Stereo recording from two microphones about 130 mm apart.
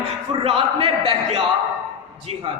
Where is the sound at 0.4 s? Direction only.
45° right (ahead or behind).